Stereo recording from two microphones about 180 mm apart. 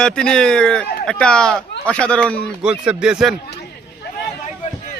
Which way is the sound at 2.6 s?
5° right (ahead or behind).